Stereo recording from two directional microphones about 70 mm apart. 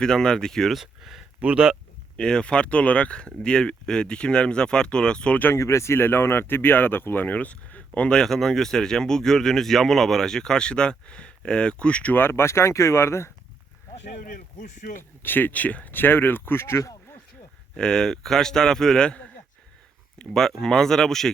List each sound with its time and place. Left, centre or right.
0.0 s speech: centre
1.4 s speech: right
2.1 s speech: centre
5.5 s speech: left; by 12.1 s centre
12.1 s speech: left
15.2 s speech: left
17.7 s speech: centre